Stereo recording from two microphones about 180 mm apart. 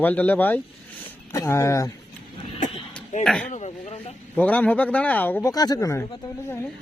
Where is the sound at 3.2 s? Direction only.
5° left (ahead or behind).